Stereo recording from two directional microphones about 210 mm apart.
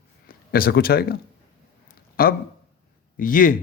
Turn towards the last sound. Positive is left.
turn(degrees=40)  # may be behind; listen again after turning